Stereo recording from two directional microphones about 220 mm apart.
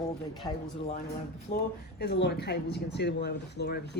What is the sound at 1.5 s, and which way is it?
Speech, 45° left (ahead or behind).